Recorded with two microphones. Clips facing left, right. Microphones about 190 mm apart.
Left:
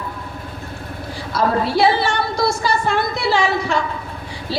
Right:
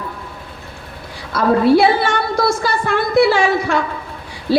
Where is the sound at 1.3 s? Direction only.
55° right (ahead or behind).